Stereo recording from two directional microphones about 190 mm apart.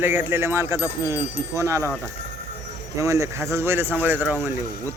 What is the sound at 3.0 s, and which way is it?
A man's voice, 15° right (ahead or behind).